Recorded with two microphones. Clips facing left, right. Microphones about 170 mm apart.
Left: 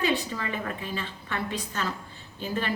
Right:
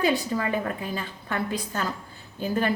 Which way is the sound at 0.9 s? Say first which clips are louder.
Right 3 dB; 45° right (ahead or behind).